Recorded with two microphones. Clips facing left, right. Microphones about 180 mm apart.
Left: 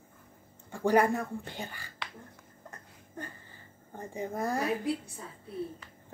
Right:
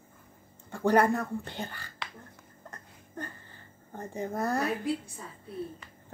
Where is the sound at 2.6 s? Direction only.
10° left (ahead or behind).